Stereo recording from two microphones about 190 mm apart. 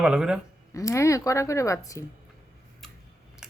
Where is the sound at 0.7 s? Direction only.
15° left (ahead or behind).